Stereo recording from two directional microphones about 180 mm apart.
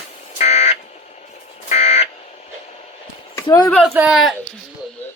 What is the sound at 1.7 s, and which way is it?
Buzzer, 35° left (ahead or behind).